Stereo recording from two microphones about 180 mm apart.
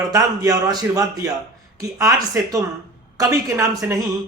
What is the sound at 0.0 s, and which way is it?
A woman's voice, 20° right (ahead or behind).